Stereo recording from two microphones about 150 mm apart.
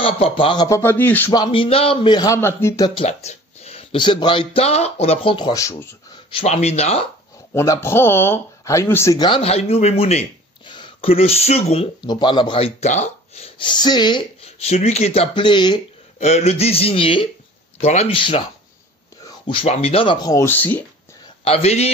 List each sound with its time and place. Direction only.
0.0 s speech: 35° left (ahead or behind); by 1.3 s 10° left (ahead or behind)
1.3 s speech: 30° left (ahead or behind)
3.0 s speech: 45° left (ahead or behind); by 5.9 s 20° left (ahead or behind)
6.3 s speech: 45° left (ahead or behind)
7.5 s speech: 20° left (ahead or behind)
9.2 s speech: 40° left (ahead or behind)
10.6 s speech: 30° left (ahead or behind)
13.7 s speech: 30° left (ahead or behind)
14.4 s speech: 45° left (ahead or behind)
16.2 s speech: 45° left (ahead or behind); by 20.8 s 10° left (ahead or behind)
21.5 s speech: 45° left (ahead or behind)